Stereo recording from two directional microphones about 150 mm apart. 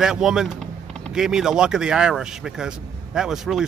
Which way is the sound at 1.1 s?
5° right (ahead or behind).